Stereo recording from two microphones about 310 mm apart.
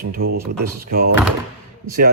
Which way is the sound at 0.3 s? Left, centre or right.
Right.